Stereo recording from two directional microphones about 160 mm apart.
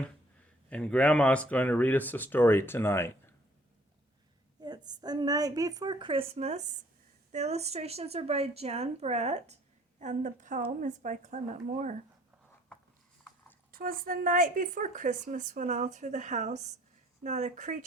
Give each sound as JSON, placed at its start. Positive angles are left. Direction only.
{"t": 0.7, "sound": "speech", "side_deg": 5}
{"t": 4.6, "sound": "a woman's voice", "side_deg": -25}
{"t": 13.7, "sound": "a woman's voice", "side_deg": -65}